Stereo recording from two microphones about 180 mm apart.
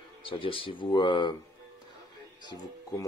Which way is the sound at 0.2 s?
30° left (ahead or behind).